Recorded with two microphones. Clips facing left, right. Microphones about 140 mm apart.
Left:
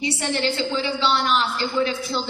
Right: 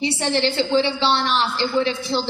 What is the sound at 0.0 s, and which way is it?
A woman's voice, 30° right (ahead or behind).